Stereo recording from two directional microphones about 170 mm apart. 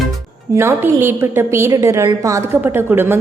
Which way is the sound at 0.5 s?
15° right (ahead or behind).